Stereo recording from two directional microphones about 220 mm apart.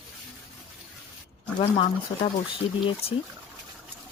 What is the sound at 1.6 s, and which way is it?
Speech, 25° left (ahead or behind).